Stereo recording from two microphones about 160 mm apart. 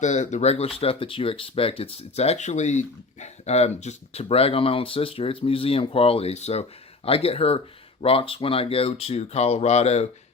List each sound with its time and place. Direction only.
0.0 s speech: 50° left (ahead or behind)